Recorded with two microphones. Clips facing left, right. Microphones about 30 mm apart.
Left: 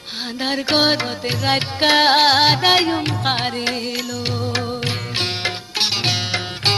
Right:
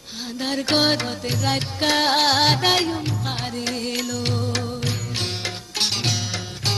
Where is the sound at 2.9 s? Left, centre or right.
Left.